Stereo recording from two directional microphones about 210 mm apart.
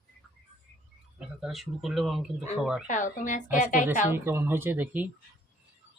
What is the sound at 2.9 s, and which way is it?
Speech, 35° left (ahead or behind).